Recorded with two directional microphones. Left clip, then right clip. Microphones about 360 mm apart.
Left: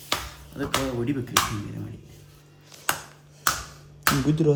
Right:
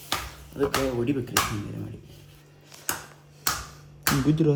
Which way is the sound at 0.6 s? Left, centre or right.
Centre.